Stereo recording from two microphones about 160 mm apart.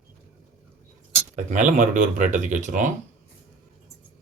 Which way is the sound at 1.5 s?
55° right (ahead or behind).